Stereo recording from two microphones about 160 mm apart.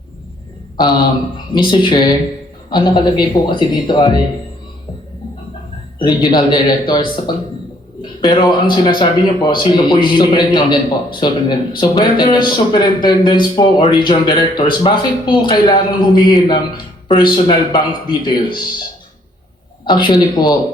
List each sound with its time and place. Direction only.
0.8 s speech: 25° left (ahead or behind)
6.2 s speech: 25° left (ahead or behind)
19.8 s speech: 30° left (ahead or behind)